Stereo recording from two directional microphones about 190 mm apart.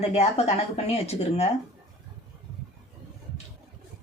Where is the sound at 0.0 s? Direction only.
30° left (ahead or behind).